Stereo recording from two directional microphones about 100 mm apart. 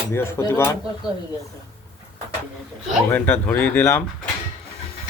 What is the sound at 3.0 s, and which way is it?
Speech, 20° left (ahead or behind).